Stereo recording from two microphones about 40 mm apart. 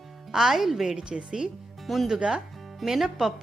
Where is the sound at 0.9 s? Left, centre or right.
Centre.